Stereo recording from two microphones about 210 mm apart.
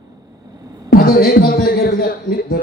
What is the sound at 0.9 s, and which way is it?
Speech, 45° left (ahead or behind).